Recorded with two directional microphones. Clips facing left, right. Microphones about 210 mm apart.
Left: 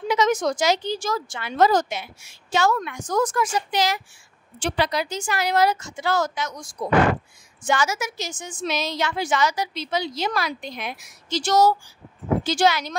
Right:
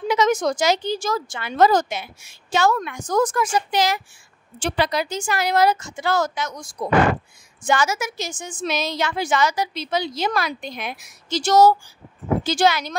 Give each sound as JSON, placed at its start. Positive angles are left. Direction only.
{"t": 0.1, "sound": "a woman's voice", "side_deg": -50}
{"t": 7.6, "sound": "a woman's voice", "side_deg": -50}